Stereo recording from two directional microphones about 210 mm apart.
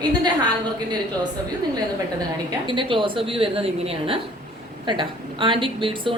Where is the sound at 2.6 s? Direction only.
25° right (ahead or behind).